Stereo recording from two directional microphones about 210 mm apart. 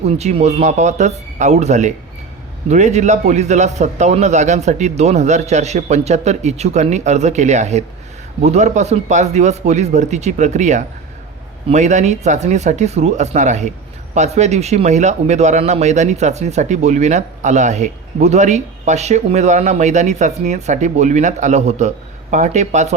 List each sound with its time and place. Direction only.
0.0 s speech: 30° right (ahead or behind)